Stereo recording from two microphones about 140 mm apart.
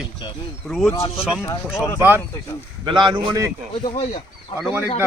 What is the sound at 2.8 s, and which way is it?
Speech, 35° right (ahead or behind).